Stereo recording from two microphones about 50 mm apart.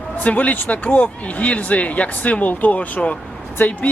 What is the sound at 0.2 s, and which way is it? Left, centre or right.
Speech, left.